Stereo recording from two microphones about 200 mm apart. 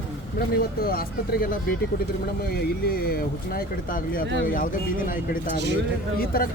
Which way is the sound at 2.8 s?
50° left (ahead or behind).